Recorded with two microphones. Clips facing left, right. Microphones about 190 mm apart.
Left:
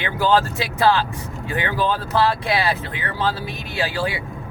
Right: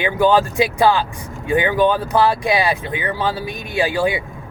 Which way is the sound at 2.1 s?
15° right (ahead or behind).